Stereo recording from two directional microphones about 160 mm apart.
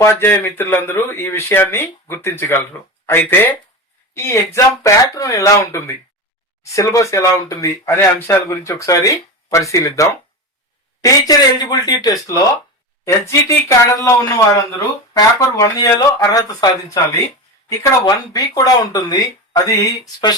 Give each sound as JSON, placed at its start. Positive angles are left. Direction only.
{"t": 0.0, "sound": "speech", "side_deg": 15}